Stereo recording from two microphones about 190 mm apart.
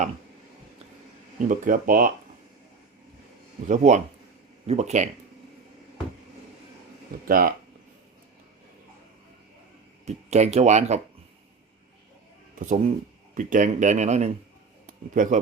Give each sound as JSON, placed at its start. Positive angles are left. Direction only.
{"t": 1.5, "sound": "speech", "side_deg": -45}
{"t": 3.7, "sound": "speech", "side_deg": -40}
{"t": 7.3, "sound": "speech", "side_deg": -50}
{"t": 10.1, "sound": "speech", "side_deg": -35}
{"t": 12.5, "sound": "speech", "side_deg": -40}